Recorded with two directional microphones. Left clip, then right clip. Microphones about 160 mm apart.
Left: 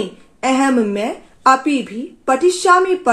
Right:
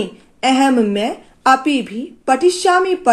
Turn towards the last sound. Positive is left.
turn(degrees=-35)  # may be behind; listen again after turning